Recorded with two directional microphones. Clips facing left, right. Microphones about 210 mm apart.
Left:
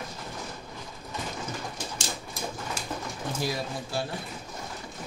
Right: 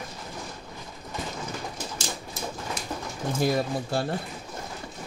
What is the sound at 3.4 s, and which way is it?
Speech, 55° right (ahead or behind).